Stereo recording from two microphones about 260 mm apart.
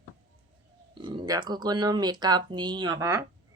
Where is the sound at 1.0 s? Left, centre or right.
Centre.